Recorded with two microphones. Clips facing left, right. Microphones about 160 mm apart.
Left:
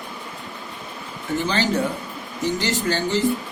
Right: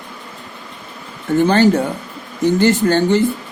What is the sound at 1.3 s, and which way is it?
Speech, 55° right (ahead or behind).